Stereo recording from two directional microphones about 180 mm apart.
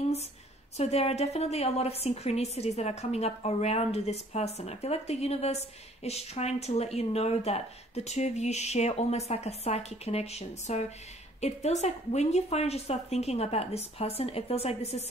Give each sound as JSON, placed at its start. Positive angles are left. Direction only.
{"t": 0.7, "sound": "a woman's voice", "side_deg": 35}